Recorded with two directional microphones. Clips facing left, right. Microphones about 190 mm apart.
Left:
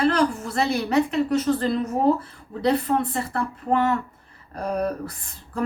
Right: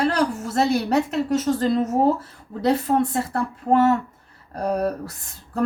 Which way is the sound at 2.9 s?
40° right (ahead or behind).